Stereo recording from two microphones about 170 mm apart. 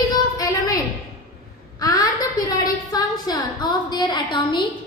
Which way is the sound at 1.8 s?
20° left (ahead or behind).